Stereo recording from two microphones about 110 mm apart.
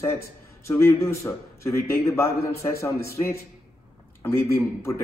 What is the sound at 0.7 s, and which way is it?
Speech, 25° left (ahead or behind).